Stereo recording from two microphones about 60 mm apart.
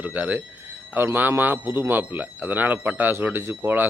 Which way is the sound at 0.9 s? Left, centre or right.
Right.